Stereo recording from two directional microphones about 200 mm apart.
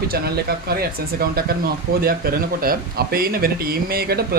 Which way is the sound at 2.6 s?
45° right (ahead or behind).